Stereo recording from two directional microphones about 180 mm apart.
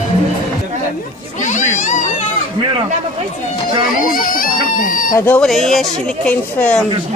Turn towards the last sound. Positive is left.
turn(degrees=5)  # may be behind; listen again after turning